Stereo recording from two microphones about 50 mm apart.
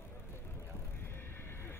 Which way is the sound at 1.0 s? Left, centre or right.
Left.